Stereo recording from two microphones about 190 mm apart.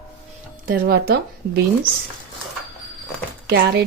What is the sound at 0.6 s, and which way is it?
Speech, 55° right (ahead or behind).